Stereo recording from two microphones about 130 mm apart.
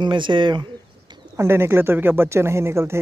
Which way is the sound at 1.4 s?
20° right (ahead or behind).